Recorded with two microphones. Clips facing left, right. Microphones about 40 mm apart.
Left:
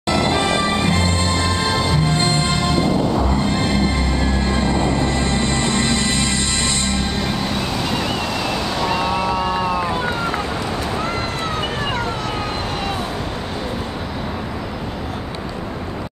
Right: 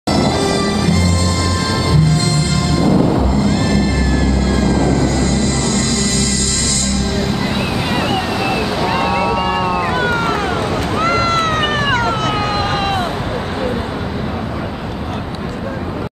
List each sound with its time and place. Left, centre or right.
0.1 s music: left
8.4 s vehicle: right
8.6 s waves: centre
8.9 s vehicle: right
9.4 s a sound: right
9.8 s vehicle: right
11.0 s cat: right